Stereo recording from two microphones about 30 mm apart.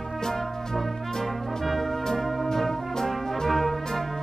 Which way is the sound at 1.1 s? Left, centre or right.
Centre.